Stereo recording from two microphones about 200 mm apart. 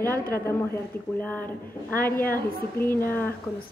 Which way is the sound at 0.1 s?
10° left (ahead or behind).